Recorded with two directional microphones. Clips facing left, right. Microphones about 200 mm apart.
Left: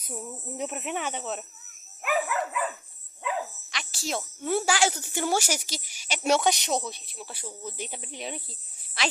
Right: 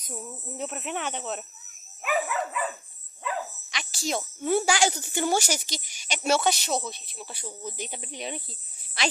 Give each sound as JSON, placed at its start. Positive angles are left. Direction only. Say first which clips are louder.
{"t": 0.0, "sound": "speech", "louder": "left 1 dB", "side_deg": 10}